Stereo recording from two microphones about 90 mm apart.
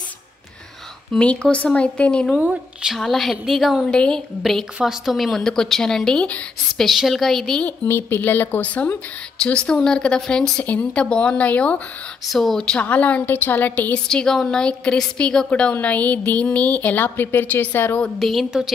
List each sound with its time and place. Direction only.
1.1 s a woman's voice: 10° left (ahead or behind)
2.4 s speech: 15° right (ahead or behind)
2.9 s a woman's voice: centre (ahead or behind)
3.9 s a woman's voice: 10° left (ahead or behind)
6.9 s a woman's voice: centre (ahead or behind)
7.9 s a woman's voice: 20° left (ahead or behind); by 10.5 s 5° left (ahead or behind)
10.6 s a woman's voice: 15° left (ahead or behind)
12.3 s a woman's voice: centre (ahead or behind); by 14.0 s 20° left (ahead or behind)
14.0 s a woman's voice: 5° left (ahead or behind)
18.2 s a woman's voice: centre (ahead or behind)